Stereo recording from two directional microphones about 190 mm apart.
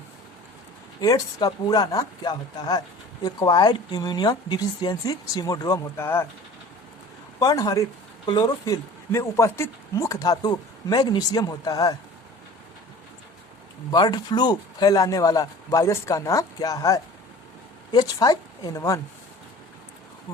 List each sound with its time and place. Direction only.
1.0 s speech: 20° left (ahead or behind)
7.3 s speech: 20° left (ahead or behind)
13.9 s speech: 20° left (ahead or behind)